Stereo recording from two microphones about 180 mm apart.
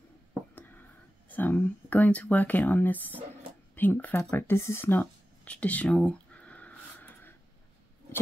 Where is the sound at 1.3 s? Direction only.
10° left (ahead or behind).